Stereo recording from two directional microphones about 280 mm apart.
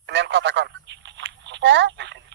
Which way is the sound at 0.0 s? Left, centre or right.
Right.